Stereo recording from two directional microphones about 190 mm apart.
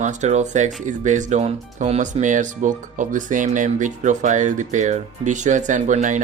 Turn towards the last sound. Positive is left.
turn(degrees=-40)  # may be behind; listen again after turning